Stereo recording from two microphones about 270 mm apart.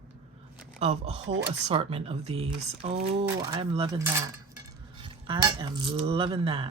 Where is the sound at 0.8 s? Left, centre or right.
Right.